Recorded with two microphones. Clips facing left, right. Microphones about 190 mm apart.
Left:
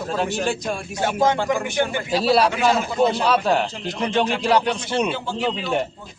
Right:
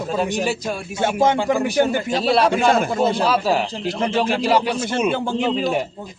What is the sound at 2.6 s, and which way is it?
Speech, 55° right (ahead or behind).